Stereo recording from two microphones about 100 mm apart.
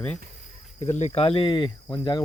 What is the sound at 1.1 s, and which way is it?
Speech, 80° left.